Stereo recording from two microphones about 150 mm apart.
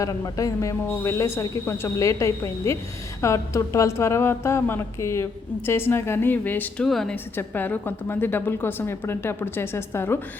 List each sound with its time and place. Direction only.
0.0 s a woman's voice: 20° left (ahead or behind); by 7.2 s centre (ahead or behind)
7.3 s a woman's voice: 10° left (ahead or behind)